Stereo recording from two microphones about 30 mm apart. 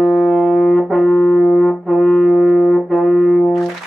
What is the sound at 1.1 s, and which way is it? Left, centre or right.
Brass instrument, centre.